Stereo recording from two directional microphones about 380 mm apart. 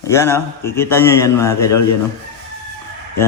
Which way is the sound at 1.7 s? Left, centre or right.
Left.